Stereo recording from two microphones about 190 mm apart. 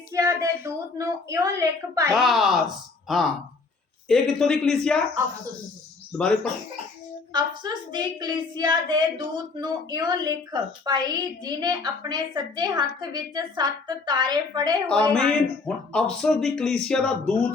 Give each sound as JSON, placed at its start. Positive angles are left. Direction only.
{"t": 0.1, "sound": "a woman's voice", "side_deg": -15}
{"t": 2.1, "sound": "speech", "side_deg": 0}
{"t": 6.1, "sound": "speech", "side_deg": 5}
{"t": 7.3, "sound": "a woman's voice", "side_deg": -20}
{"t": 14.8, "sound": "speech", "side_deg": 5}